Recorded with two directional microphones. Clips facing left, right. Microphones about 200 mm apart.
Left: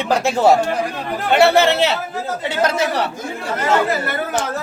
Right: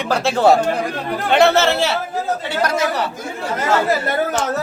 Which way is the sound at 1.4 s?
15° left (ahead or behind).